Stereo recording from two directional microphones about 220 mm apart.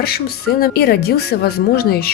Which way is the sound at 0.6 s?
45° left (ahead or behind).